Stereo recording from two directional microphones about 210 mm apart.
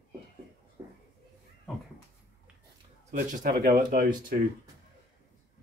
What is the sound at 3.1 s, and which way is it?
Speech, 35° right (ahead or behind).